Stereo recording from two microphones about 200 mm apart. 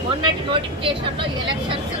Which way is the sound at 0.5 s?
25° right (ahead or behind).